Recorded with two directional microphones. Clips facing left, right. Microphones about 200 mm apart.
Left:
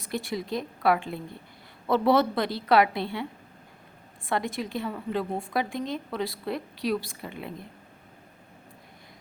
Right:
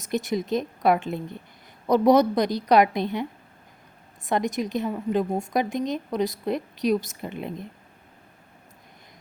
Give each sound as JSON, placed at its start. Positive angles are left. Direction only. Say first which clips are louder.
{"t": 0.0, "sound": "a woman's voice", "louder": "right 5 dB", "side_deg": -20}
{"t": 4.3, "sound": "a woman's voice", "louder": "right 4 dB", "side_deg": -20}